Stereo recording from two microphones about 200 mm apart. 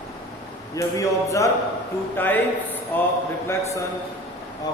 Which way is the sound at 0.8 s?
15° left (ahead or behind).